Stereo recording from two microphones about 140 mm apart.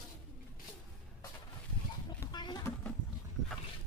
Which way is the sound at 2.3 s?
30° left (ahead or behind).